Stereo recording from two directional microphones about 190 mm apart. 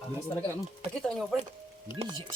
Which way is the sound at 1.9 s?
25° right (ahead or behind).